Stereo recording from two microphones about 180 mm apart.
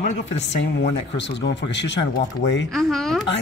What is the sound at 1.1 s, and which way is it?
Speech, 75° left (ahead or behind).